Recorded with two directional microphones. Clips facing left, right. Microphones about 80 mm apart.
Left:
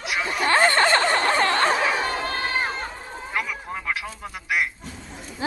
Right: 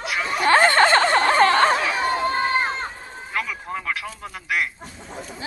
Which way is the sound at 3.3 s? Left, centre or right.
Centre.